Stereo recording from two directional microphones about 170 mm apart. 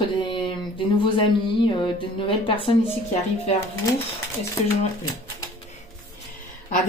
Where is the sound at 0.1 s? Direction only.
30° left (ahead or behind).